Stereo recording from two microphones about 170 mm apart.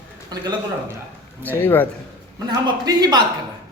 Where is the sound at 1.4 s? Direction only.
10° left (ahead or behind).